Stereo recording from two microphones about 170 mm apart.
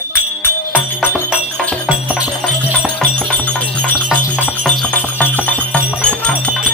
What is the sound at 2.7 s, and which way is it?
Music, 5° left (ahead or behind).